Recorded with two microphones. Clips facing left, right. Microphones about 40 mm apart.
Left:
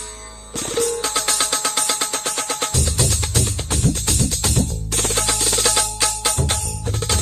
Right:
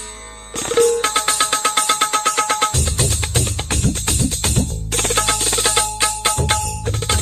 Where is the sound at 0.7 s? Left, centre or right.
Right.